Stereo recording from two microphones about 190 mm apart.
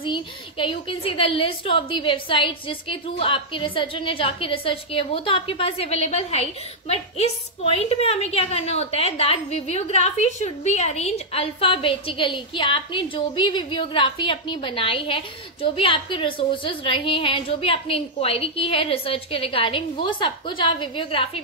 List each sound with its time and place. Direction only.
0.0 s a woman's voice: 25° left (ahead or behind)